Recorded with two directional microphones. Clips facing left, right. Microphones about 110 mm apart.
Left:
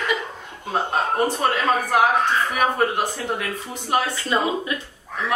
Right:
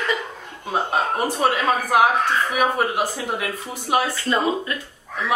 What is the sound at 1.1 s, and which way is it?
A man's voice, 5° right (ahead or behind).